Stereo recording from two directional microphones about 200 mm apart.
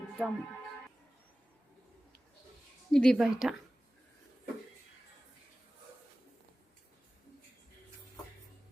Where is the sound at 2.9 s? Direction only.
5° left (ahead or behind).